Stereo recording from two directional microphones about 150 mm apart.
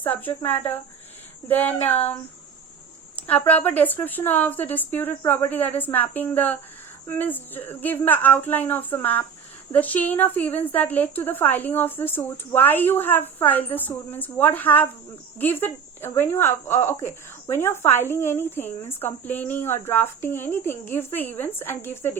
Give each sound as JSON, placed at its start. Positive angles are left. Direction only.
{"t": 0.0, "sound": "a woman's voice", "side_deg": 10}
{"t": 3.2, "sound": "a woman's voice", "side_deg": 10}